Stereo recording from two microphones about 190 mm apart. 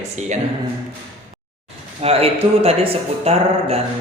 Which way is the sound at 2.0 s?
30° right (ahead or behind).